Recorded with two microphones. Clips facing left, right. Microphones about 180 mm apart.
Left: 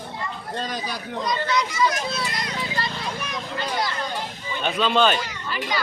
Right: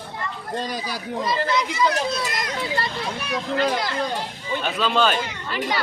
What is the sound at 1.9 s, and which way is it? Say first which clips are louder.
Speech: right 3 dB; 40° right (ahead or behind).